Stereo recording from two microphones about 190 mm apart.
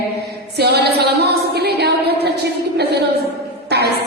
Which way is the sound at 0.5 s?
60° right (ahead or behind).